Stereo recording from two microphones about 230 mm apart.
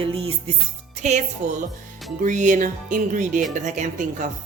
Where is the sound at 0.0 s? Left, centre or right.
Right.